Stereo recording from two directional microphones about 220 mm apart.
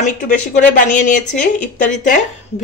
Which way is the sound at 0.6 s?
35° left (ahead or behind).